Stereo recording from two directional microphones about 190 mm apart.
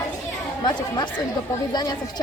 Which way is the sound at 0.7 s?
25° left (ahead or behind).